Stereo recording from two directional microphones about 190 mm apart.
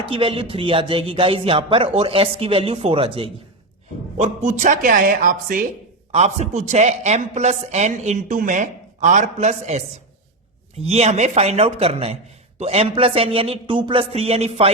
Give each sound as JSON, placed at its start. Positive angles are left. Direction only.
{"t": 0.0, "sound": "a man's voice", "side_deg": -25}
{"t": 6.1, "sound": "a woman's voice", "side_deg": -35}
{"t": 10.8, "sound": "a woman's voice", "side_deg": -35}